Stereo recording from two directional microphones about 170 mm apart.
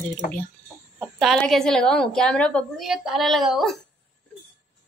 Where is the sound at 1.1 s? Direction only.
5° left (ahead or behind).